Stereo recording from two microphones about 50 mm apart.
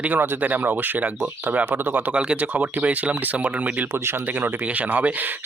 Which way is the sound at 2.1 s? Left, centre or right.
Centre.